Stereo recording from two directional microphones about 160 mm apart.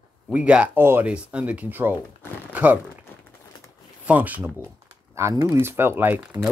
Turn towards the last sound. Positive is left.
turn(degrees=-15)  # may be behind; listen again after turning